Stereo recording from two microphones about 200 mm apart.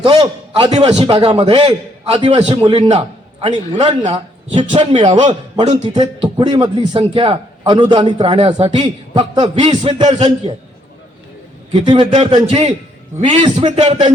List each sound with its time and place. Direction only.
0.0 s a man's voice: 30° right (ahead or behind)
11.7 s a man's voice: 25° right (ahead or behind)
13.4 s a man's voice: 25° right (ahead or behind)
13.7 s a man's voice: 35° right (ahead or behind)